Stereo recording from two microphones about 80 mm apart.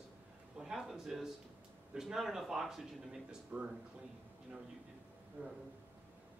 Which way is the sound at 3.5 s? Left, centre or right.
Centre.